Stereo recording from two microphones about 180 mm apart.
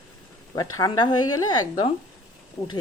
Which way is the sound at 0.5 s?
20° left (ahead or behind).